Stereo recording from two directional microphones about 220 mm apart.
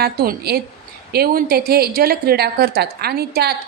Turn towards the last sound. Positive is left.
turn(degrees=-45)  # may be behind; listen again after turning